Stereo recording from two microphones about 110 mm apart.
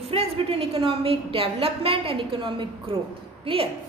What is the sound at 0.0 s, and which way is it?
A woman's voice, 65° right (ahead or behind).